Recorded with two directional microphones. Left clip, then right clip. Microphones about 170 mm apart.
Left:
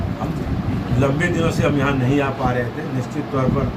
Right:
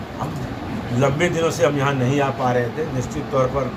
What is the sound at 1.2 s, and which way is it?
A man's voice, centre (ahead or behind).